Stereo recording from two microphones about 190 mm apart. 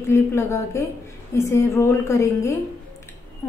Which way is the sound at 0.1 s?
15° left (ahead or behind).